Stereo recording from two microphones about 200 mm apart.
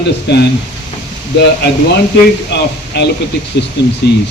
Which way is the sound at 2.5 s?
60° left (ahead or behind).